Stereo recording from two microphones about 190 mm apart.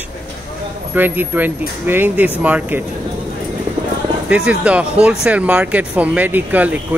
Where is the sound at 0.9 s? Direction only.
10° right (ahead or behind).